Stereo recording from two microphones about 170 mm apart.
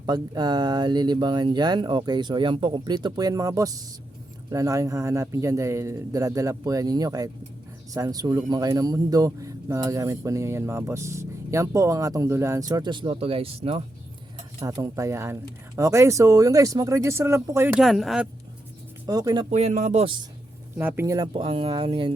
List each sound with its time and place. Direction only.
0.0 s speech: 25° right (ahead or behind)
14.6 s speech: 20° right (ahead or behind)
17.7 s speech: centre (ahead or behind)
19.0 s speech: 20° right (ahead or behind)
19.5 s speech: 40° right (ahead or behind)
20.7 s speech: 10° right (ahead or behind)
21.3 s speech: 30° right (ahead or behind)